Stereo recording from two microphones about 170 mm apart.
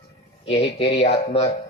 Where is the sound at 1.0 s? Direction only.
40° left (ahead or behind).